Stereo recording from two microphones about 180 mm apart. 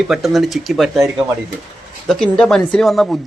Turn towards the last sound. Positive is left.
turn(degrees=0)  # may be behind; listen again after turning